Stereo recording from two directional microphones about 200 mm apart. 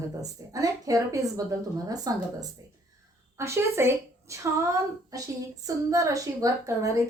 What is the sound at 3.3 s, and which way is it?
A woman's voice, 15° right (ahead or behind).